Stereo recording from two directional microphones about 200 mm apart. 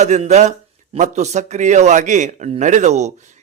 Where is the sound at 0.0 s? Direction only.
35° right (ahead or behind).